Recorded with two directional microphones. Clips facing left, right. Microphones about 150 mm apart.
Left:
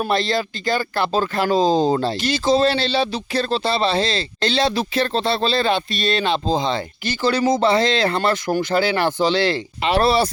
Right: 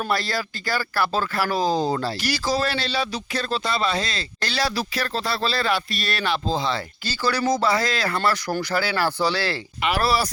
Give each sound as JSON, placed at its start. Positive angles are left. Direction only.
{"t": 0.1, "sound": "speech", "side_deg": 25}